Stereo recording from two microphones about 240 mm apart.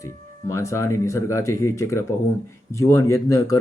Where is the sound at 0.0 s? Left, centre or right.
Centre.